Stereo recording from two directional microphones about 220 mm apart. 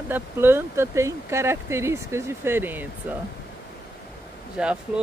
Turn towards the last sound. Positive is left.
turn(degrees=-5)  # may be behind; listen again after turning